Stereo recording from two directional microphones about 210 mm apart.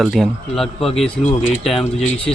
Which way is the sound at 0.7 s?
25° left (ahead or behind).